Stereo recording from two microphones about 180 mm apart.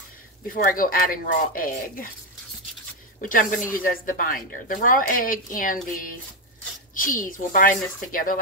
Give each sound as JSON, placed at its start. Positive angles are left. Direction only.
{"t": 0.5, "sound": "speech", "side_deg": 50}
{"t": 3.2, "sound": "speech", "side_deg": 50}